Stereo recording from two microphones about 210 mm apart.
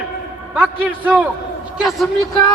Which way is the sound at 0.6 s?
5° right (ahead or behind).